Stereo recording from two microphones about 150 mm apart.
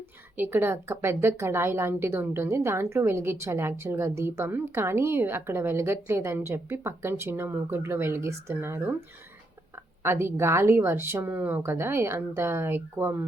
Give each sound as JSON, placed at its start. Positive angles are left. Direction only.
{"t": 0.3, "sound": "a woman's voice", "side_deg": -15}